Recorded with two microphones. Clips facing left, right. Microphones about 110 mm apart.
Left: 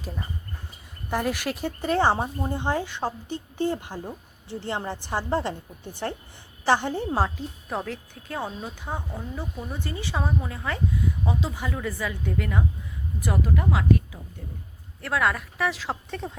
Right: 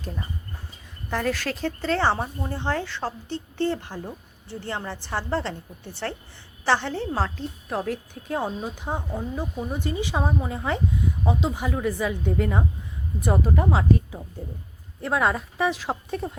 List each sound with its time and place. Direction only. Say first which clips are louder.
1.1 s speech: even; 15° left (ahead or behind)
7.9 s a woman's voice: right 6 dB; 15° right (ahead or behind)